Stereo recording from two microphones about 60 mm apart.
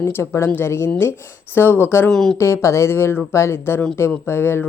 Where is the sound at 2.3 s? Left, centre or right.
Left.